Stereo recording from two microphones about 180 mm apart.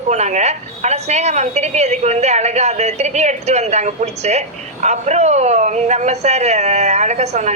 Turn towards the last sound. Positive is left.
turn(degrees=-40)  # may be behind; listen again after turning